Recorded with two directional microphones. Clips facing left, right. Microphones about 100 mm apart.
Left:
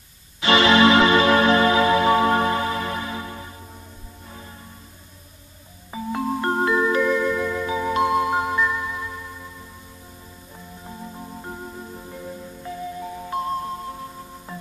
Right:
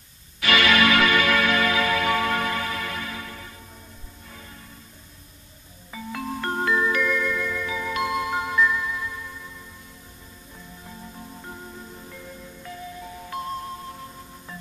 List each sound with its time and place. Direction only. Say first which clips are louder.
0.4 s music: left 4 dB; 25° left (ahead or behind)
5.9 s marimba: left 6 dB; 25° left (ahead or behind)
11.1 s music: left 4 dB; 25° left (ahead or behind)